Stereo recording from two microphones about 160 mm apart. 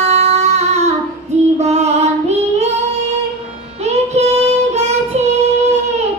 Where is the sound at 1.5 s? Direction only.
45° right (ahead or behind).